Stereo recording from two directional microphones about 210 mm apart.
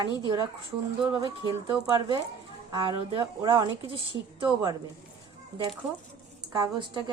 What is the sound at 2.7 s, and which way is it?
Speech, 25° right (ahead or behind).